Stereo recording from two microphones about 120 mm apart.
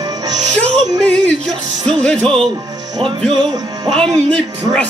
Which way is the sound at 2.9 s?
40° right (ahead or behind).